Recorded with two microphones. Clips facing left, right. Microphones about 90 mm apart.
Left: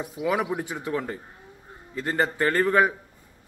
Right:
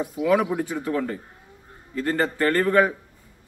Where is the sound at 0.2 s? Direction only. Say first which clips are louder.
Right 5 dB; 15° left (ahead or behind).